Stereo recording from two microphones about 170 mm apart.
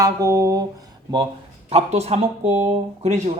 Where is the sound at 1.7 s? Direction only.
40° right (ahead or behind).